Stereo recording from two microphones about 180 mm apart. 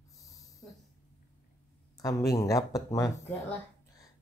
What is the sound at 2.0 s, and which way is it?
A man's voice, 20° left (ahead or behind).